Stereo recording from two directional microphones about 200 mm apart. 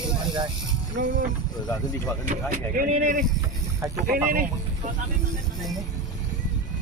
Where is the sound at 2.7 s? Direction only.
45° right (ahead or behind).